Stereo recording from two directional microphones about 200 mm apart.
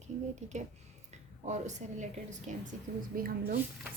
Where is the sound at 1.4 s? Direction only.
35° right (ahead or behind).